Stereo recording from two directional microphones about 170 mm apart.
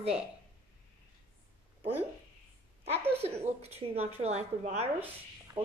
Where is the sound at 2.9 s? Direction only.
10° right (ahead or behind).